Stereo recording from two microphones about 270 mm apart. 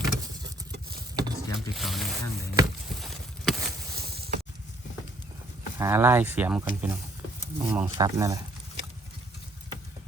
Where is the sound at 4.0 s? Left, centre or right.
Right.